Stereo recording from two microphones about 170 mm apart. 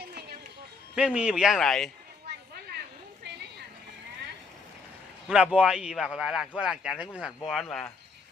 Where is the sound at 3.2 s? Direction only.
90° right.